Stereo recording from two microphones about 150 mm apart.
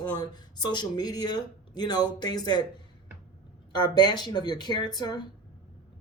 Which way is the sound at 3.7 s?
30° left (ahead or behind).